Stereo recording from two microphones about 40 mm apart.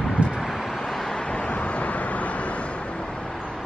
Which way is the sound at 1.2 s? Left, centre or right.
Left.